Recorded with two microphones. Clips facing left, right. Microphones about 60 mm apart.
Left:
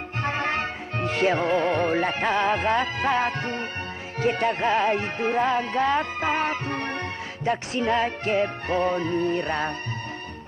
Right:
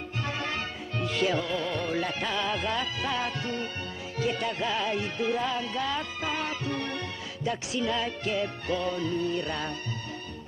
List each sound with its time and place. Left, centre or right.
0.2 s music: left